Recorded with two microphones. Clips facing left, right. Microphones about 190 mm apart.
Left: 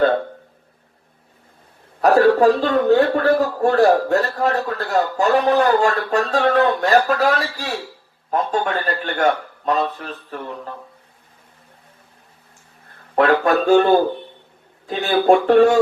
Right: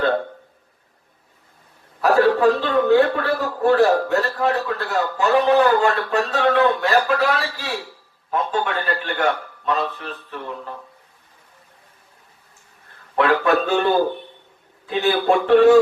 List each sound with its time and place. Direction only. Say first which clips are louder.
2.0 s a sound: left 3 dB; 45° left (ahead or behind)
3.6 s a man's voice: right 2 dB; 40° left (ahead or behind)
13.1 s a man's voice: left 2 dB; 45° left (ahead or behind)